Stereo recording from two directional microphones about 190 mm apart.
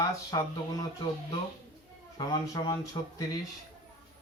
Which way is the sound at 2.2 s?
25° left (ahead or behind).